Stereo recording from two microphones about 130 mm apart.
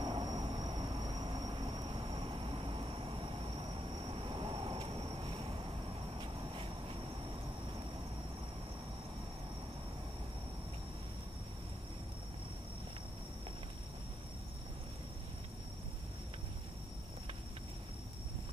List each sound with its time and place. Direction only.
0.0 s vehicle: 35° right (ahead or behind)